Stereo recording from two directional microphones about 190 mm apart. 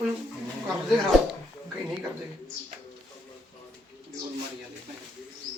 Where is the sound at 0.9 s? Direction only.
Centre (ahead or behind).